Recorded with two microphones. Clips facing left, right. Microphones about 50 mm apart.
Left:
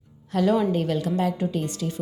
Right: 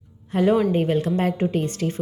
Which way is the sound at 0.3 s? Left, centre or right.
Right.